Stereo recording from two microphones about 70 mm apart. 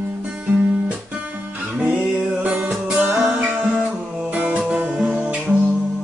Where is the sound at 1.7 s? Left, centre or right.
Right.